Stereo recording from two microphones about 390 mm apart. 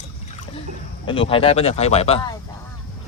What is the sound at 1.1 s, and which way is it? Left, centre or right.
Speech, centre.